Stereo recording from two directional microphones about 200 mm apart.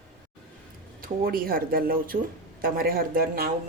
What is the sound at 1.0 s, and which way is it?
A woman's voice, 45° right (ahead or behind).